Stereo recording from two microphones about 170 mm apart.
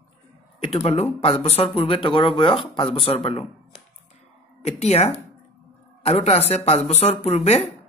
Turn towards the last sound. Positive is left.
turn(degrees=40)  # may be behind; listen again after turning